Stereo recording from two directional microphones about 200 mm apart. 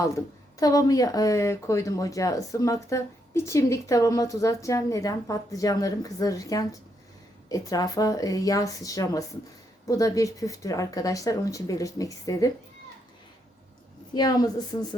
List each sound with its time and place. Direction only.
0.6 s speech: 15° left (ahead or behind)
14.1 s a woman's voice: 20° left (ahead or behind)